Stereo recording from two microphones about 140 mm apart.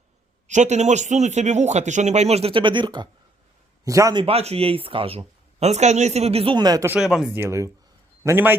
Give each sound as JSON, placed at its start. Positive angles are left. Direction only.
{"t": 0.4, "sound": "a man's voice", "side_deg": -60}
{"t": 4.2, "sound": "speech", "side_deg": -45}
{"t": 6.6, "sound": "a man's voice", "side_deg": -30}
{"t": 6.8, "sound": "speech", "side_deg": -5}
{"t": 7.3, "sound": "a man's voice", "side_deg": -20}